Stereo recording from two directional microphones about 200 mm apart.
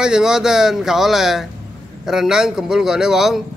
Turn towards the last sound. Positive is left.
turn(degrees=0)  # may be behind; listen again after turning